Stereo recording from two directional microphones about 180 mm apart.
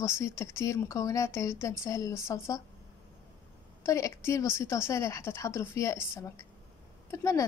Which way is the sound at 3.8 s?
15° left (ahead or behind).